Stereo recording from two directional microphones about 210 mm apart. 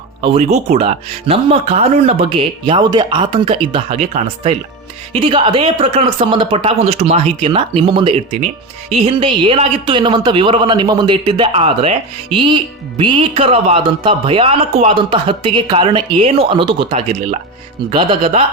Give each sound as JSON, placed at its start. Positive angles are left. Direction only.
{"t": 0.2, "sound": "speech", "side_deg": -30}